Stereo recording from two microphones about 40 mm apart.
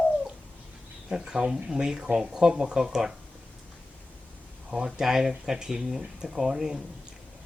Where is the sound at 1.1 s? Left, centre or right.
Centre.